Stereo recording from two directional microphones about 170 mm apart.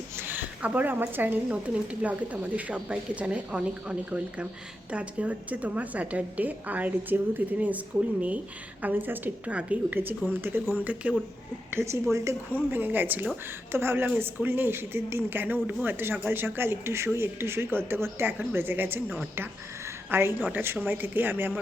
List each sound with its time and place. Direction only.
0.2 s speech: 10° right (ahead or behind)
8.8 s speech: 10° right (ahead or behind)